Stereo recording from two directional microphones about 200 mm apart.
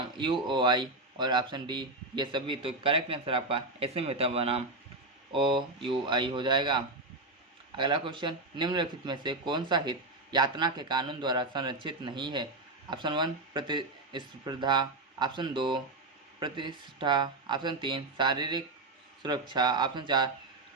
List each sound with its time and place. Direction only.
0.0 s speech: 25° right (ahead or behind)